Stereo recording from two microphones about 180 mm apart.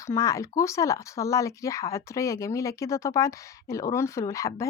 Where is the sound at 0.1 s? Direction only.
15° left (ahead or behind).